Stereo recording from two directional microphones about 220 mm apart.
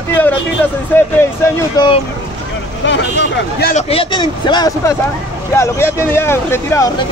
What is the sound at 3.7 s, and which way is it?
A man's voice, 25° left (ahead or behind).